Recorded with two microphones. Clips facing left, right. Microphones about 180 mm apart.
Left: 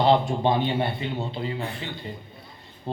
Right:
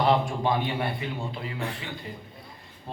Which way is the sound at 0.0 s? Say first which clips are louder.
Left 3 dB; 25° left (ahead or behind).